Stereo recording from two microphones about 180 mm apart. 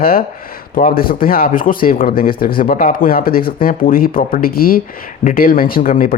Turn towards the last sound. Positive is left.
turn(degrees=50)  # may be behind; listen again after turning